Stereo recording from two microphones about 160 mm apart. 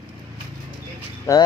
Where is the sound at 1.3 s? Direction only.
20° left (ahead or behind).